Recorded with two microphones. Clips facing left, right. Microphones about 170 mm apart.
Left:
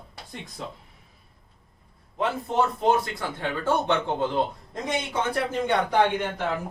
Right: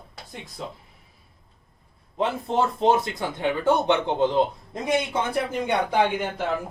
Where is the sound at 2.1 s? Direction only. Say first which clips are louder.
Right 1 dB; 25° right (ahead or behind).